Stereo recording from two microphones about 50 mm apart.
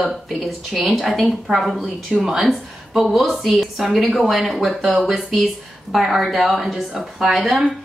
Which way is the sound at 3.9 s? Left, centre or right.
Centre.